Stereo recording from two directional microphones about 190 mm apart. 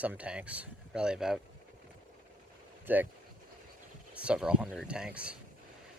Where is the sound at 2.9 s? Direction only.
10° right (ahead or behind).